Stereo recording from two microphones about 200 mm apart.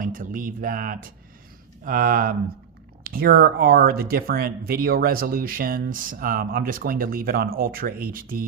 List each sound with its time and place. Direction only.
0.0 s speech: 40° right (ahead or behind)